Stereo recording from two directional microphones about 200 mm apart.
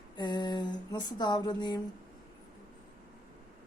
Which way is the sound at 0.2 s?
20° left (ahead or behind).